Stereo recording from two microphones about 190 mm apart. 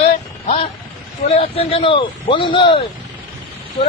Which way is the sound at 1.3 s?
30° left (ahead or behind).